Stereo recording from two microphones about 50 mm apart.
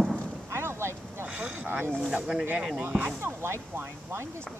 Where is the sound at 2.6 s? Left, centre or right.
Centre.